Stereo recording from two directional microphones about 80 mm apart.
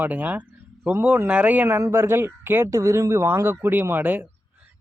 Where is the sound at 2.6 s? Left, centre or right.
Right.